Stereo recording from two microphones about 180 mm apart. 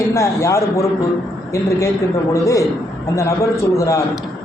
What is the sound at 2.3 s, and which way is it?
Speech, 15° left (ahead or behind).